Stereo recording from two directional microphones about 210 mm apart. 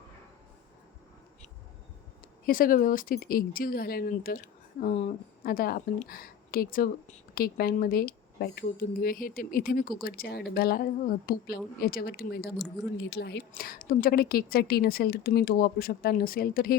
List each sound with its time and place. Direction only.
2.5 s a woman's voice: 40° left (ahead or behind)